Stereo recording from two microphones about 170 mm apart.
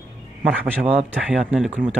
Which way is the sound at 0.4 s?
35° right (ahead or behind).